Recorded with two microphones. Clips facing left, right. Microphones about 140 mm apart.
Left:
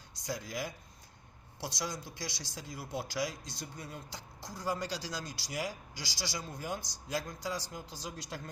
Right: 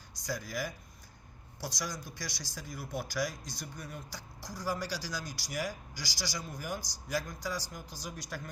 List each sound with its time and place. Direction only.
0.3 s speech: 20° left (ahead or behind)